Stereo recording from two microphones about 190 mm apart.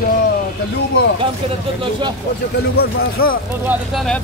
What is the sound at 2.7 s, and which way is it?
Speech, 50° left (ahead or behind).